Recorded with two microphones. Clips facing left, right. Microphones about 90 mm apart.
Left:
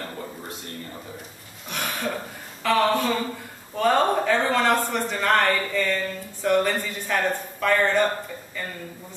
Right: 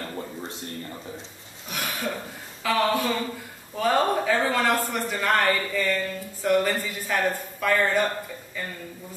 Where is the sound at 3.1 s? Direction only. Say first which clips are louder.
Left 2 dB; 15° left (ahead or behind).